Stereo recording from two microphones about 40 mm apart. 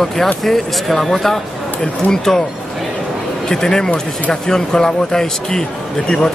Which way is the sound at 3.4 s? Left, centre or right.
Centre.